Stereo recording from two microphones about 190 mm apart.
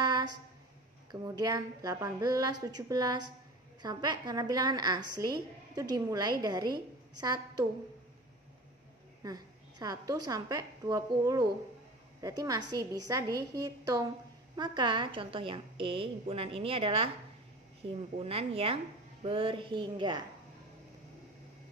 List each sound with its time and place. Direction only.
1.2 s a woman's voice: 20° right (ahead or behind)
9.2 s a woman's voice: 20° right (ahead or behind)